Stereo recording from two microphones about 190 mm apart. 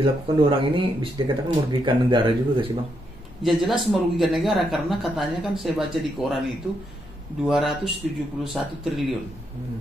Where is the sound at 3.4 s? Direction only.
Centre (ahead or behind).